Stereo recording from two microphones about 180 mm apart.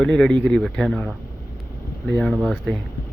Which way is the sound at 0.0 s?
5° left (ahead or behind).